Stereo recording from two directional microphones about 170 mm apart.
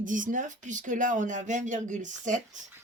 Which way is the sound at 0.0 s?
50° right (ahead or behind).